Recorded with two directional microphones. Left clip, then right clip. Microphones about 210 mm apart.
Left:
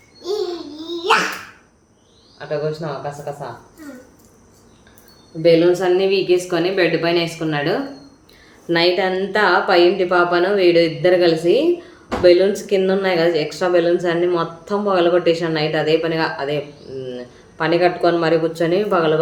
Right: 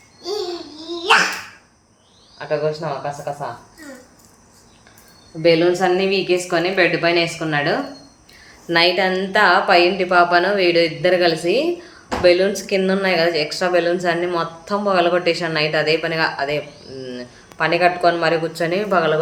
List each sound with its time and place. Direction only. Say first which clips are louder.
0.8 s babbling: right 1 dB; centre (ahead or behind)
2.4 s speech: right 2 dB; 25° right (ahead or behind)
5.4 s a woman's voice: left 1 dB; 20° right (ahead or behind)
8.6 s a woman's voice: right 1 dB; centre (ahead or behind)